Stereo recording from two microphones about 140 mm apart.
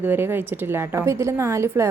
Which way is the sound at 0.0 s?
15° right (ahead or behind).